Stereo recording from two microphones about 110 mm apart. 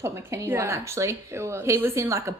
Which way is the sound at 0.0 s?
25° right (ahead or behind).